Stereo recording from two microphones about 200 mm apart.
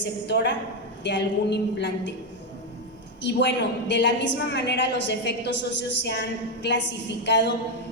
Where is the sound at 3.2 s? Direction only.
60° left (ahead or behind).